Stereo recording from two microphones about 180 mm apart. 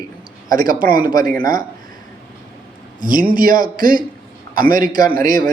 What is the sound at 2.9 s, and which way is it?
A man's voice, 50° right (ahead or behind).